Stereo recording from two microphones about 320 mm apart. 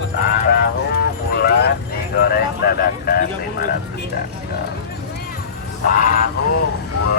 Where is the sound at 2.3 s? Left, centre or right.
Left.